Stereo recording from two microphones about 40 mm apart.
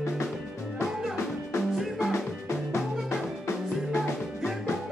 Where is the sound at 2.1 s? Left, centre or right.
Left.